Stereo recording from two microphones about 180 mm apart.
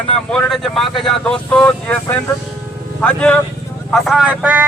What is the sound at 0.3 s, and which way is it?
Speech, 5° left (ahead or behind).